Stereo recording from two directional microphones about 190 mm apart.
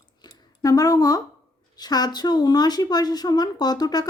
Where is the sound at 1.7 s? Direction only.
20° left (ahead or behind).